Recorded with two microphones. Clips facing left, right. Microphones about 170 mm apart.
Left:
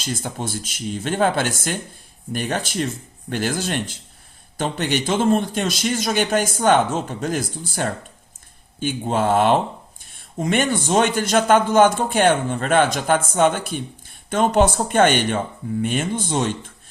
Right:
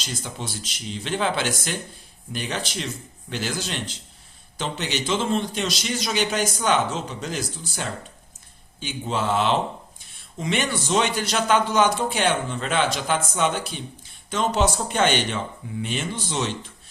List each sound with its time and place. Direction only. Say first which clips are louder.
0.0 s a man's voice: left 6 dB; 50° left (ahead or behind)